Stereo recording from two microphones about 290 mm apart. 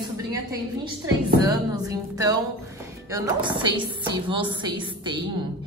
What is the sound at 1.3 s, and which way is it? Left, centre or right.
Mantra, centre.